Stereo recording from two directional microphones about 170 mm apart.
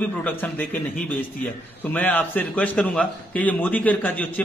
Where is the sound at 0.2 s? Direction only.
10° left (ahead or behind).